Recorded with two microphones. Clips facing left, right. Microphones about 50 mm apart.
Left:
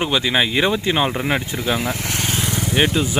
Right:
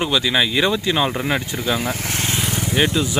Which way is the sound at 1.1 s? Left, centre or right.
Centre.